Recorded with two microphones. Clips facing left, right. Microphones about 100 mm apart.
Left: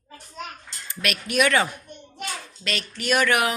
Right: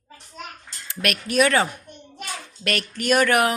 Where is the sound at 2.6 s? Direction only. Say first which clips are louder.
Right 5 dB; 55° right (ahead or behind).